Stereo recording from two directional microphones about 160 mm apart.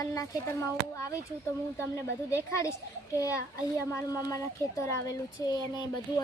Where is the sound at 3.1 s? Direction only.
20° left (ahead or behind).